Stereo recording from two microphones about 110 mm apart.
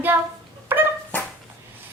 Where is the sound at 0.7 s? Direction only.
20° right (ahead or behind).